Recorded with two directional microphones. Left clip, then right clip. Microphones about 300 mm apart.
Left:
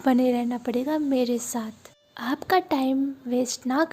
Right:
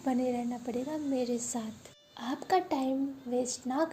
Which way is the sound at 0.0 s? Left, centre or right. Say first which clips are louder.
Left 9 dB; left.